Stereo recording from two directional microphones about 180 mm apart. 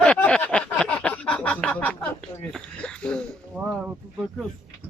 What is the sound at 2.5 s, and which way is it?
Speech, 5° left (ahead or behind).